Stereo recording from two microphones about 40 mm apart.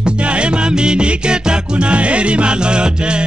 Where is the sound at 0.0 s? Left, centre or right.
Right.